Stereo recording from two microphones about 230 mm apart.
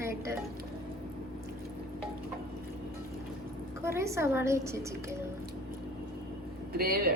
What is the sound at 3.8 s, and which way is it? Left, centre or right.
A woman's voice, centre.